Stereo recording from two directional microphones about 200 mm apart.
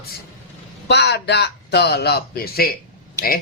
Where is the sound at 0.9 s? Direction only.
60° left (ahead or behind).